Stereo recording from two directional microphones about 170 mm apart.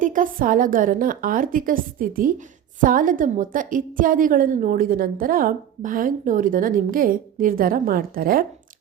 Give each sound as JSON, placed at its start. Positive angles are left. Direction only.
{"t": 0.0, "sound": "a woman's voice", "side_deg": -50}